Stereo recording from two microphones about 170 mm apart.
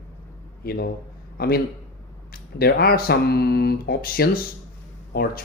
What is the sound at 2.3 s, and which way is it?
Speech, 65° left (ahead or behind).